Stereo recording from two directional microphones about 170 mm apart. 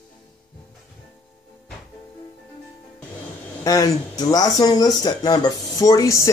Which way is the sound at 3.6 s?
20° left (ahead or behind).